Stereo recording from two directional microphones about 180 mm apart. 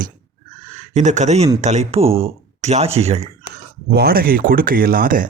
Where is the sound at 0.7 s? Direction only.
40° right (ahead or behind).